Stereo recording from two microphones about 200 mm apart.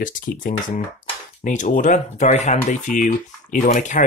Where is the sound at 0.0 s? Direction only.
40° left (ahead or behind).